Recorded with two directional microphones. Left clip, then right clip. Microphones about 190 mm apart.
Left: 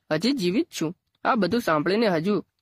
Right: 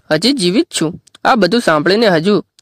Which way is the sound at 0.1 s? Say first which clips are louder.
Right 11 dB; 35° right (ahead or behind).